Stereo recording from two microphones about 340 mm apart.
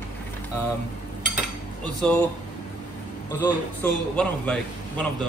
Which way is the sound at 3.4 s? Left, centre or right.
Centre.